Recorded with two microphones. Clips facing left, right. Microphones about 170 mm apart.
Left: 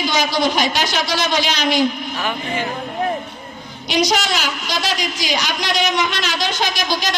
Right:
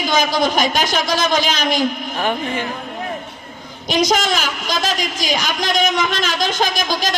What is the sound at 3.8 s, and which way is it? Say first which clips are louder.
A woman's voice: right 2 dB; 45° right (ahead or behind).